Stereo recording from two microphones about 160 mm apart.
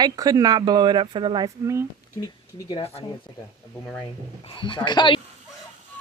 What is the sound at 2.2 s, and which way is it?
Speech, 25° left (ahead or behind).